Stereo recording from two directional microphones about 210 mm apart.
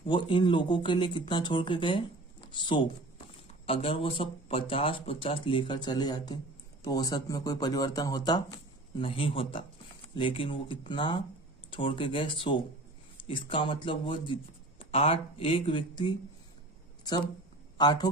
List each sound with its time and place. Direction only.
0.0 s speech: 25° left (ahead or behind)
17.7 s a man's voice: 20° left (ahead or behind)